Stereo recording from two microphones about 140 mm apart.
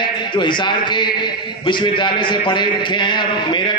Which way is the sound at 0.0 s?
35° left (ahead or behind).